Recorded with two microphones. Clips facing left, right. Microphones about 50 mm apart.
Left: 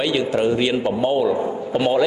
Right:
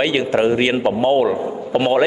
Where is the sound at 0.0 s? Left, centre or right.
Right.